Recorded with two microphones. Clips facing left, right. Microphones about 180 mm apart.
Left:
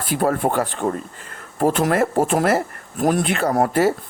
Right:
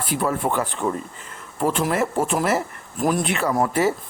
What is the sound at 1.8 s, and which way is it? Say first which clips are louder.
Speech: left 3 dB; 55° left (ahead or behind).